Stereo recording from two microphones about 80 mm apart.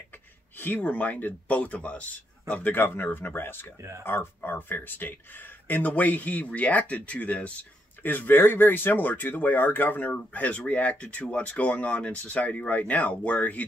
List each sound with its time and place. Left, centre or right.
0.6 s speech: left